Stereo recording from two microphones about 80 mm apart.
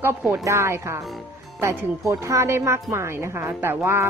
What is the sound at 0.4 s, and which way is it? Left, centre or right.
A woman's voice, right.